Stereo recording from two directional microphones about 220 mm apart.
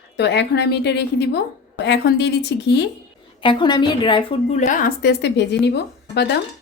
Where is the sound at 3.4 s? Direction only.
20° left (ahead or behind); by 6.2 s 50° left (ahead or behind).